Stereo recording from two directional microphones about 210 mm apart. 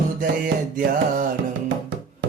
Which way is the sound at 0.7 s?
40° right (ahead or behind).